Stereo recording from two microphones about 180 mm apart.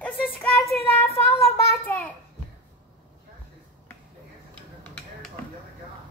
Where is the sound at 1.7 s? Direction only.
10° left (ahead or behind).